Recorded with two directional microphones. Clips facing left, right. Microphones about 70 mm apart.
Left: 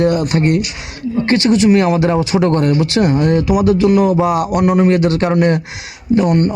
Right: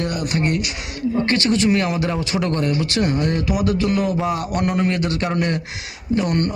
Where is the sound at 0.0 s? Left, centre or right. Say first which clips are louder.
Left 8 dB; left.